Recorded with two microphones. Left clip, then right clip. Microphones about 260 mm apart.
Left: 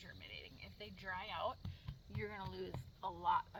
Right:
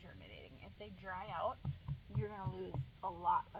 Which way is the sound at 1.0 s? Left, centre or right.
Left.